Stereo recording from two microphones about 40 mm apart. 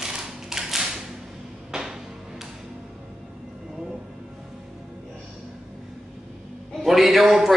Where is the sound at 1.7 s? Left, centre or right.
Centre.